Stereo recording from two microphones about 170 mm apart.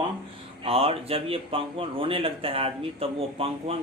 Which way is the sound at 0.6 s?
35° right (ahead or behind).